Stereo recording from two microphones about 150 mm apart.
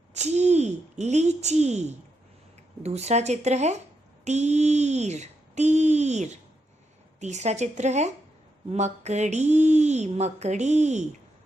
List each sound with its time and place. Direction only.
0.1 s speech: 50° right (ahead or behind)